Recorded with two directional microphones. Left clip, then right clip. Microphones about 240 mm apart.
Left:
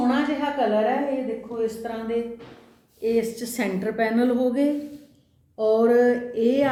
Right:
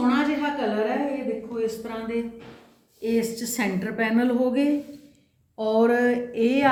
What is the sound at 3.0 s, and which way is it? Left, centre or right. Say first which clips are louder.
A woman's voice: left 2 dB; right.